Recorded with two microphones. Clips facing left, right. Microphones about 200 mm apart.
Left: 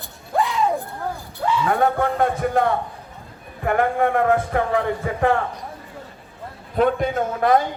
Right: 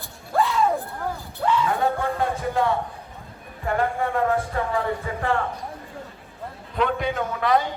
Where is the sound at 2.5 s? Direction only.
50° left (ahead or behind).